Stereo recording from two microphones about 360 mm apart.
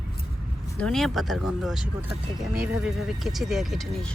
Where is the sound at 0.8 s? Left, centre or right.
Centre.